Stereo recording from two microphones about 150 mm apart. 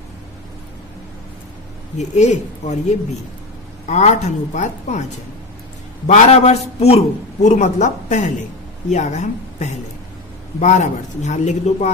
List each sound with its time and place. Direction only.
2.0 s speech: 50° left (ahead or behind)
6.0 s a woman's voice: 45° left (ahead or behind)